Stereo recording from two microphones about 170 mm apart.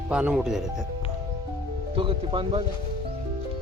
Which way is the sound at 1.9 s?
30° right (ahead or behind).